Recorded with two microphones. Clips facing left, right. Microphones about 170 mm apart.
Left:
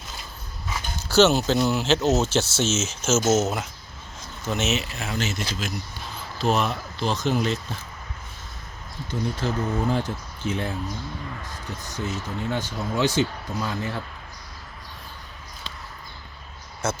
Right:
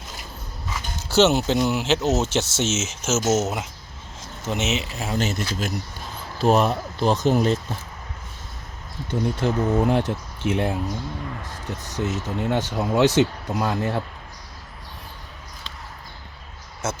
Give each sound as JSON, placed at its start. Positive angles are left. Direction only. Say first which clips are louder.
{"t": 1.0, "sound": "speech", "louder": "even", "side_deg": -20}
{"t": 5.2, "sound": "speech", "louder": "right 3 dB", "side_deg": -50}
{"t": 9.0, "sound": "speech", "louder": "right 4 dB", "side_deg": -60}
{"t": 11.9, "sound": "speech", "louder": "right 4 dB", "side_deg": -75}